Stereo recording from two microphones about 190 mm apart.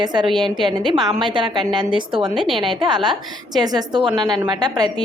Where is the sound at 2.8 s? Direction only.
25° right (ahead or behind).